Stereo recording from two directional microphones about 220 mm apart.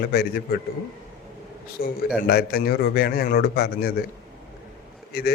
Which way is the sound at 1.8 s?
40° left (ahead or behind).